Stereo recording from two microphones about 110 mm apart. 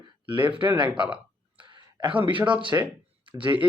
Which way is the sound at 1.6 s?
45° right (ahead or behind).